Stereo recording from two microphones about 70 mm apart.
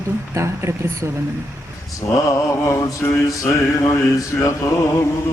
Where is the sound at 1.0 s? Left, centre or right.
Right.